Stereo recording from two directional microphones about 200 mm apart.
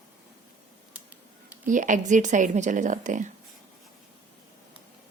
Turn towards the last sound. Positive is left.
turn(degrees=-40)  # may be behind; listen again after turning